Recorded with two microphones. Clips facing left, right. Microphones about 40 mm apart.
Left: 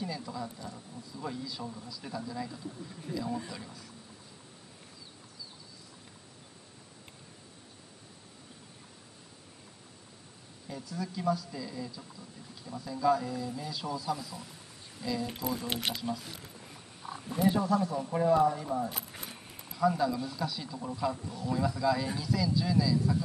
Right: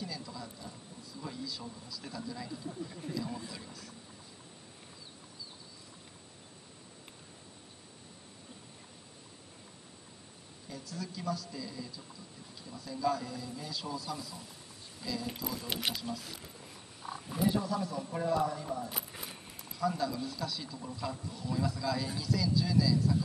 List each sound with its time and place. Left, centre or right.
0.0 s a sound: centre
1.1 s speech: centre
2.7 s speech: centre
3.3 s speech: centre
10.7 s speech: centre
15.8 s wild animals: centre
17.5 s speech: left
18.9 s a sound: centre
19.7 s speech: centre